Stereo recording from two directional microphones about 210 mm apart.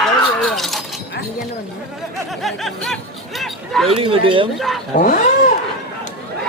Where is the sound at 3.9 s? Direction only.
25° right (ahead or behind).